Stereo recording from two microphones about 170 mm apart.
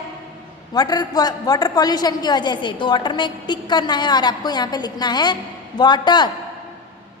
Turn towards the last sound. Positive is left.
turn(degrees=25)  # may be behind; listen again after turning